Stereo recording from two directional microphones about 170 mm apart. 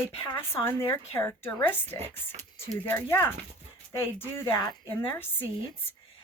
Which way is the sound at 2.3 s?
45° right (ahead or behind).